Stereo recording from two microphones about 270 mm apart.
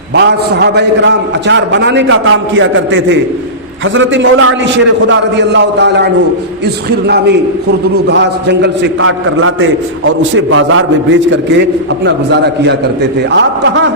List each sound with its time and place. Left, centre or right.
0.1 s a man's voice: right
8.0 s a man's voice: right